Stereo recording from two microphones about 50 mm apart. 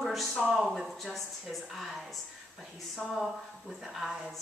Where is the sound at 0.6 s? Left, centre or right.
Centre.